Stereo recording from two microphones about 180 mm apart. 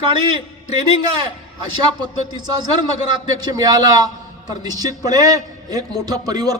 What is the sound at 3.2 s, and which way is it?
A man's voice, 20° right (ahead or behind).